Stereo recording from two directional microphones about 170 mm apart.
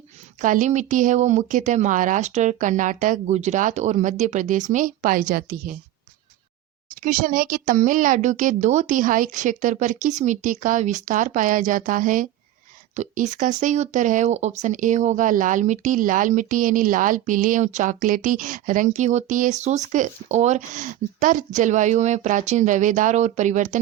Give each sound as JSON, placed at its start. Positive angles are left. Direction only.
{"t": 0.4, "sound": "speech", "side_deg": -50}
{"t": 7.0, "sound": "speech", "side_deg": -50}